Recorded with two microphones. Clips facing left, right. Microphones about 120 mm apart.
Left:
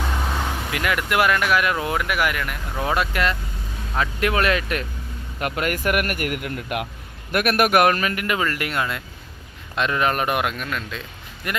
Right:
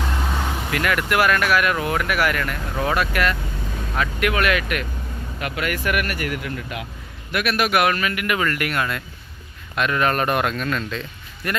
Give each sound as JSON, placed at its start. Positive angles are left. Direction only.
{"t": 0.7, "sound": "a man's voice", "side_deg": 20}
{"t": 5.4, "sound": "speech", "side_deg": 45}
{"t": 6.4, "sound": "speech", "side_deg": 60}
{"t": 7.3, "sound": "a man's voice", "side_deg": 50}